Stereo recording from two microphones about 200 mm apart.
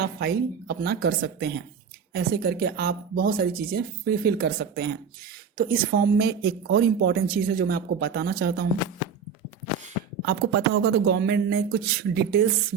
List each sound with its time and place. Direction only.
0.0 s speech: 50° right (ahead or behind)
10.2 s speech: 50° right (ahead or behind)